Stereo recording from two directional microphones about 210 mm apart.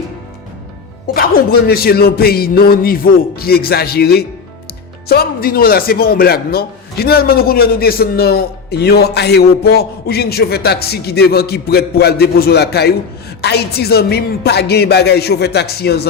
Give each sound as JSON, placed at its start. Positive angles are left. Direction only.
{"t": 1.0, "sound": "a man's voice", "side_deg": 45}